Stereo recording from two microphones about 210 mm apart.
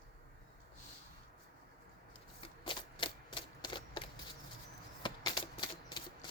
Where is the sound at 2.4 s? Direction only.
25° left (ahead or behind).